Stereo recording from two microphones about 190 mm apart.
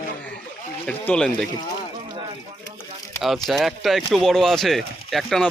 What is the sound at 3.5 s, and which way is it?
A man's voice, centre (ahead or behind).